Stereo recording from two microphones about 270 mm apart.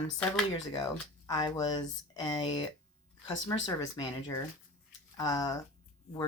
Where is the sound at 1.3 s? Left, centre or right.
Centre.